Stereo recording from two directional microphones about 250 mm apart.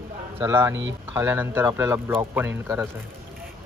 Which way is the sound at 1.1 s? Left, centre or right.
Centre.